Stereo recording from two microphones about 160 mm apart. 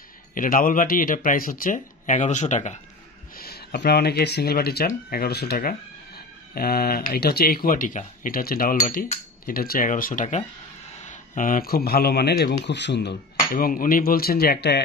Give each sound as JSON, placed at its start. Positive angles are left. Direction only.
{"t": 0.3, "sound": "speech", "side_deg": 60}
{"t": 3.3, "sound": "speech", "side_deg": 80}